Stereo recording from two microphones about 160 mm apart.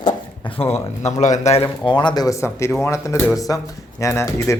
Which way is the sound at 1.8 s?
30° left (ahead or behind).